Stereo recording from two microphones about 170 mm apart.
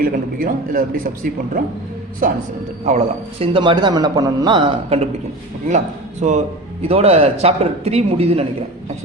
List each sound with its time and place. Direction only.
0.0 s a man's voice: 55° right (ahead or behind)
2.8 s a man's voice: 40° right (ahead or behind)
6.2 s speech: 40° right (ahead or behind)